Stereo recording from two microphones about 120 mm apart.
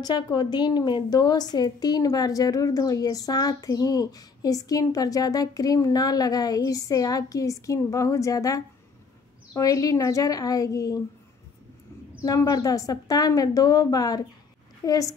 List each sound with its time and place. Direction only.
0.0 s a woman's voice: 40° left (ahead or behind)
12.2 s a woman's voice: 30° left (ahead or behind)